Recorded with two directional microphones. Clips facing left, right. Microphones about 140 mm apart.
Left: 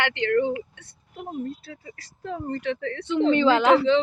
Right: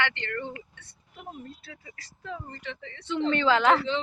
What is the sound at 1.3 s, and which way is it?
Speech, 35° left (ahead or behind).